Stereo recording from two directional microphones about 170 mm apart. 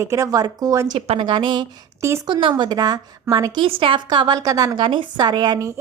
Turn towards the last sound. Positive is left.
turn(degrees=-25)  # may be behind; listen again after turning